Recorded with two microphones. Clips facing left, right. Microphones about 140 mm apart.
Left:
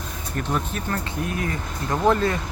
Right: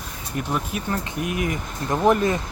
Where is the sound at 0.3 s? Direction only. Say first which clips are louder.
Even; 10° right (ahead or behind).